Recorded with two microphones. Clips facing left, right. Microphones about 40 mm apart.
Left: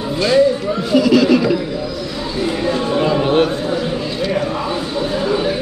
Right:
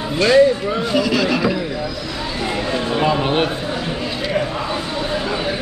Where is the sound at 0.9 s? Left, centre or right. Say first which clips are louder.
Left 7 dB; centre.